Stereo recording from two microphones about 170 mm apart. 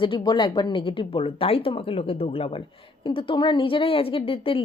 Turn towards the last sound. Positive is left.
turn(degrees=35)  # may be behind; listen again after turning